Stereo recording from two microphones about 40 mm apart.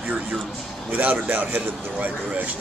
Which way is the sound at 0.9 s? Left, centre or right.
Right.